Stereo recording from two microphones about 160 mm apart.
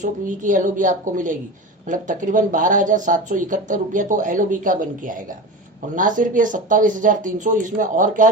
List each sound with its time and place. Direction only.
0.0 s speech: 55° right (ahead or behind)